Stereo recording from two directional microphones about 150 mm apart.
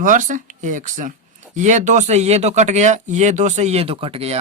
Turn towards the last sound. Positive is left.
turn(degrees=-40)  # may be behind; listen again after turning